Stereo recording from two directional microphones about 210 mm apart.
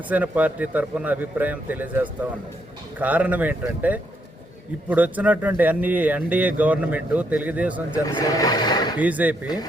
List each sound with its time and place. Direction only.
0.1 s speech: 5° right (ahead or behind)
8.0 s speech: 15° left (ahead or behind)
9.0 s speech: 5° right (ahead or behind)